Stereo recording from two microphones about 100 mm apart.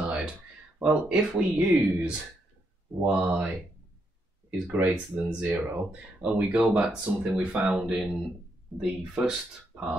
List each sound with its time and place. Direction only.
0.7 s speech: 15° right (ahead or behind)
4.6 s speech: 25° right (ahead or behind)
4.9 s speech: 15° right (ahead or behind)